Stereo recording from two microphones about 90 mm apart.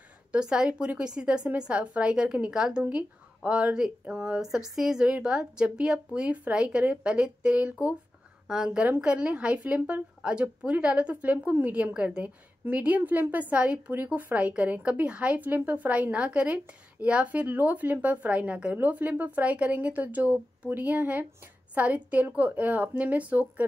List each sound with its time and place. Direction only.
0.3 s a woman's voice: 10° right (ahead or behind)